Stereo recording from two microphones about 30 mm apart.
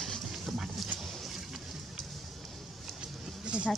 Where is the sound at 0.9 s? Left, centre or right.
Centre.